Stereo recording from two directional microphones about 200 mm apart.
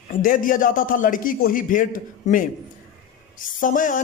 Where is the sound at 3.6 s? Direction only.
40° left (ahead or behind).